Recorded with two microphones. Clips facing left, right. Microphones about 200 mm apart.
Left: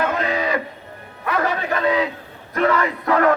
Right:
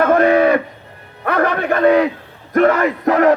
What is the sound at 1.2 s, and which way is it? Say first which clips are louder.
Music: right 5 dB; 60° right (ahead or behind).